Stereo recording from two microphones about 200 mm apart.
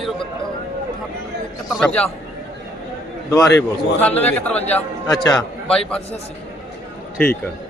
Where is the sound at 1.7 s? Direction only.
5° left (ahead or behind).